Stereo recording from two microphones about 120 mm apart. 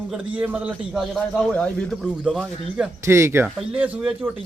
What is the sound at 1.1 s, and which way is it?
Speech, centre (ahead or behind).